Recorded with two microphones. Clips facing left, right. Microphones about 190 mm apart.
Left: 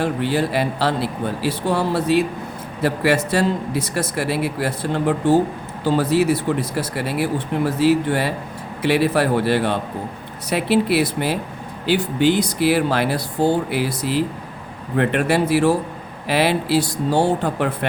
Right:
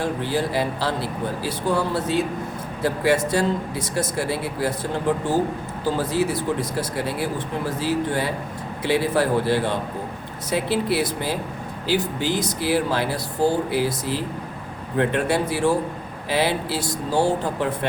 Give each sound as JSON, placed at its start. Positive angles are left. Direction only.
{"t": 0.0, "sound": "a man's voice", "side_deg": 70}